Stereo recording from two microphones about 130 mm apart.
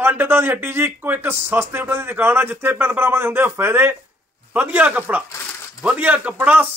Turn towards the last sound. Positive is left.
turn(degrees=-10)  # may be behind; listen again after turning